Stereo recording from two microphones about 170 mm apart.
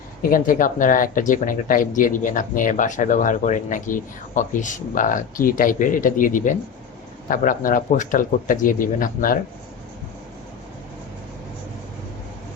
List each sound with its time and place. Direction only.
0.2 s speech: 55° left (ahead or behind)